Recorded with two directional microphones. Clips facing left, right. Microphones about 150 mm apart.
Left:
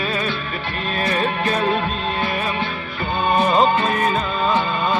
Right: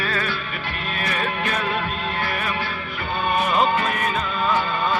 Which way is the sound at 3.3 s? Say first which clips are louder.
Left 4 dB; 30° left (ahead or behind).